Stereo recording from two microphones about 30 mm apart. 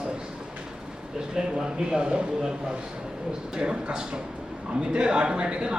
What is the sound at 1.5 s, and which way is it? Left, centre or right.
Speech, right.